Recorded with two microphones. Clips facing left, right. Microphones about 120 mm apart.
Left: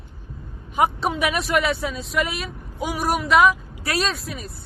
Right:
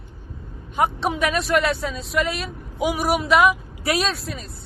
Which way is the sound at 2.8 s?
10° right (ahead or behind).